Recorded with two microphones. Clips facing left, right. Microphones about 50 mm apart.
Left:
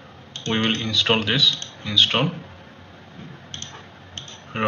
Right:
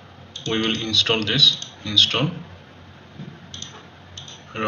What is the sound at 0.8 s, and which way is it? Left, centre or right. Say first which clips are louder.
Speech: left 1 dB; centre.